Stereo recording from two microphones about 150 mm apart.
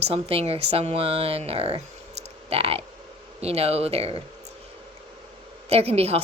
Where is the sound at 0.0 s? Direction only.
40° right (ahead or behind).